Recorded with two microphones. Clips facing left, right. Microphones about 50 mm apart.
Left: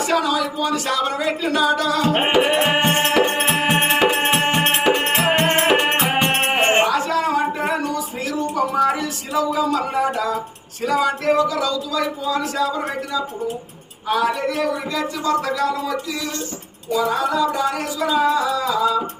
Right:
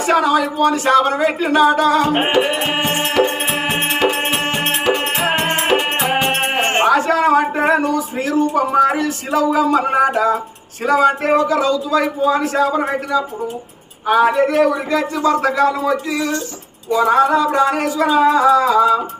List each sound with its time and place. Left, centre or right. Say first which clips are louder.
0.0 s speech: right 5 dB; centre
1.2 s singing: right 6 dB; right
2.0 s music: right 2 dB; centre
2.3 s music: even; centre
4.9 s music: even; centre
6.8 s a sound: right 6 dB; right
9.0 s a sound: right 5 dB; right
9.4 s speech: right 5 dB; right
14.1 s speech: right 7 dB; right
17.5 s music: right 6 dB; right